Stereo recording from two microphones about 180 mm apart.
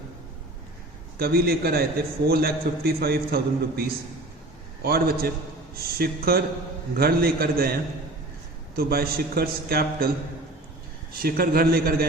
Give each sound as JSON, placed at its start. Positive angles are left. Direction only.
{"t": 1.2, "sound": "a man's voice", "side_deg": -60}
{"t": 11.1, "sound": "a man's voice", "side_deg": -55}